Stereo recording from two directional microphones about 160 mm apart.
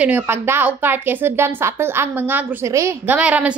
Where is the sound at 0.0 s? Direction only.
15° right (ahead or behind).